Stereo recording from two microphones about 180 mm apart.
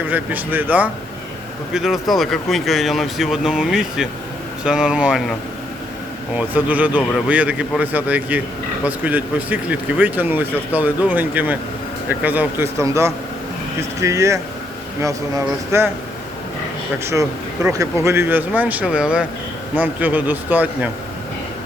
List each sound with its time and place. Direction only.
0.1 s speech: 10° right (ahead or behind)
6.3 s speech: 10° right (ahead or behind)
17.7 s speech: 15° right (ahead or behind)